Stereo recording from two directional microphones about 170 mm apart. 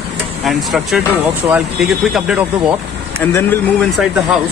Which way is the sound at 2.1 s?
5° right (ahead or behind).